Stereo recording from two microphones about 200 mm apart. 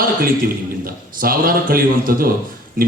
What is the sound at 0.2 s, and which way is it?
A man's voice, 45° right (ahead or behind).